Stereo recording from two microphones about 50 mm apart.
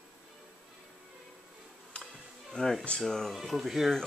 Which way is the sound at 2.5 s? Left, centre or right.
Centre.